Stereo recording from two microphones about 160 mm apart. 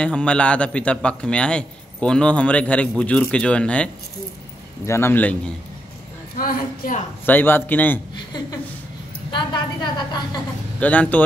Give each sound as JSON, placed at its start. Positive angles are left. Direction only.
{"t": 0.0, "sound": "a man's voice", "side_deg": 5}
{"t": 6.3, "sound": "a woman's voice", "side_deg": 65}
{"t": 7.2, "sound": "a man's voice", "side_deg": 10}
{"t": 9.3, "sound": "a woman's voice", "side_deg": 30}
{"t": 10.8, "sound": "a man's voice", "side_deg": 10}